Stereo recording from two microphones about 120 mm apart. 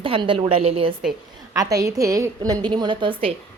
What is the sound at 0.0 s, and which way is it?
Speech, 45° right (ahead or behind).